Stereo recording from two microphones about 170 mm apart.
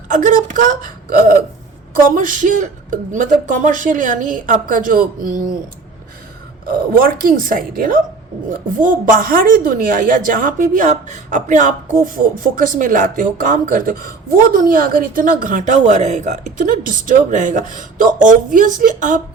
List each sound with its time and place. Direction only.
0.1 s a woman's voice: 50° right (ahead or behind)
6.7 s a woman's voice: 55° right (ahead or behind)